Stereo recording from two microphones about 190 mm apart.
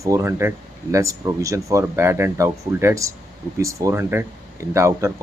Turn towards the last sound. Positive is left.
turn(degrees=-15)  # may be behind; listen again after turning